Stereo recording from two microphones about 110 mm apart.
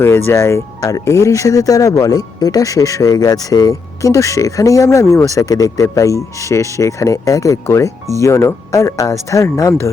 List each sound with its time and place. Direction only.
0.0 s speech: 25° left (ahead or behind)